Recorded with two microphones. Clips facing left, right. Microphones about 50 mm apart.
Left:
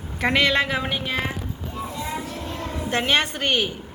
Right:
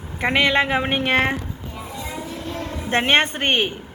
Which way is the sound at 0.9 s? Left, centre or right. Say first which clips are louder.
Right 7 dB; right.